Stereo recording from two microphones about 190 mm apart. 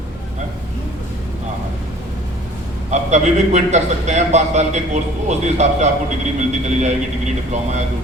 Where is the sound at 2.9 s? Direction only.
40° right (ahead or behind).